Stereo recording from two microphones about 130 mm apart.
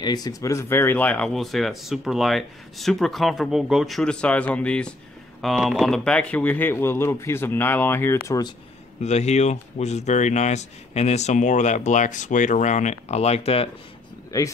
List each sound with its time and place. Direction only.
0.0 s speech: 30° left (ahead or behind)
9.0 s speech: 60° left (ahead or behind)
14.3 s speech: 30° left (ahead or behind)